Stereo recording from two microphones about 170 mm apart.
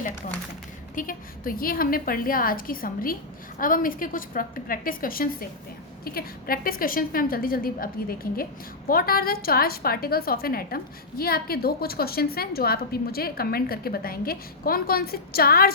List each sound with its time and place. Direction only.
0.9 s a woman's voice: 55° left (ahead or behind)